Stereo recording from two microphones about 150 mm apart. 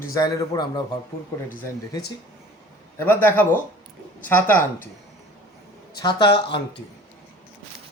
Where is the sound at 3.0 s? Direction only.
15° left (ahead or behind).